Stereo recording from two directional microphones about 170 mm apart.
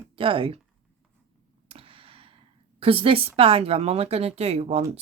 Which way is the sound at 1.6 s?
35° right (ahead or behind).